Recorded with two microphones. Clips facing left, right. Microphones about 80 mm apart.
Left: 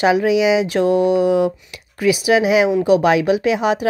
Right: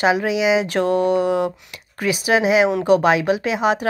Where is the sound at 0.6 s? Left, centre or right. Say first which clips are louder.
Left 3 dB; right.